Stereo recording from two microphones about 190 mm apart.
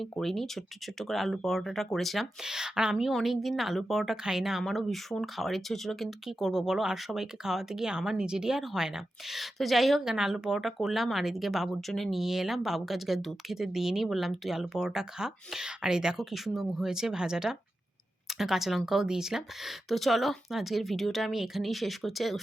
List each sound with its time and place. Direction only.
0.0 s speech: centre (ahead or behind)